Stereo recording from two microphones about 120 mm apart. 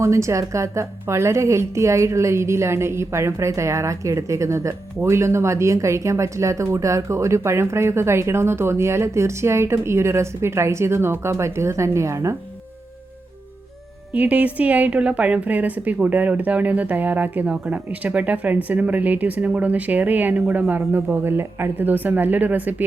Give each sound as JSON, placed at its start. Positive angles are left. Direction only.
{"t": 0.0, "sound": "a woman's voice", "side_deg": -25}
{"t": 14.1, "sound": "a woman's voice", "side_deg": -15}